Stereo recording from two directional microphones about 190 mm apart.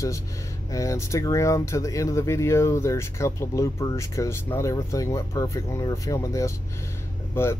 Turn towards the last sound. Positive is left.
turn(degrees=15)  # may be behind; listen again after turning